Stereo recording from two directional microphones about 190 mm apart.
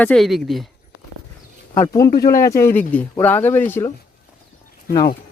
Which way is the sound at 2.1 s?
50° left (ahead or behind).